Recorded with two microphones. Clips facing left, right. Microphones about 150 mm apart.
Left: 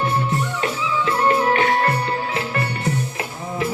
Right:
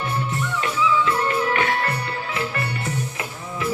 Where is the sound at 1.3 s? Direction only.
35° left (ahead or behind).